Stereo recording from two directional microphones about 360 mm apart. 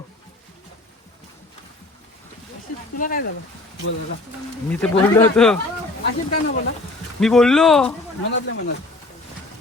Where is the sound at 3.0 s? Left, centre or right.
Left.